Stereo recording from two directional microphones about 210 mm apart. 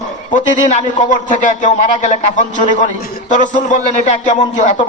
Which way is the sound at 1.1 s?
35° left (ahead or behind).